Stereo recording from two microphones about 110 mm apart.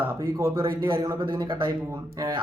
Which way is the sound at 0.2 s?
30° right (ahead or behind).